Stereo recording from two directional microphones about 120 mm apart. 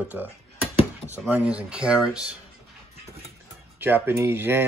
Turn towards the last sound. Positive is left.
turn(degrees=-20)  # may be behind; listen again after turning